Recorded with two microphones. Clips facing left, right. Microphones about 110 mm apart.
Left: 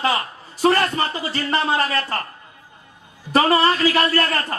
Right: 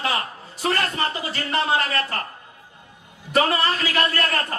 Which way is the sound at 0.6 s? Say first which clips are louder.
Left 6 dB; 35° left (ahead or behind).